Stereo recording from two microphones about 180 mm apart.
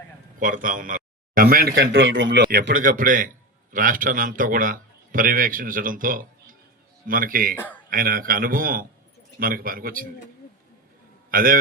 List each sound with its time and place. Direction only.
0.3 s speech: 50° right (ahead or behind)
1.7 s a man's voice: 90° right; by 2.7 s 65° right (ahead or behind)
2.7 s a man's voice: 50° right (ahead or behind)
11.3 s a man's voice: 50° right (ahead or behind)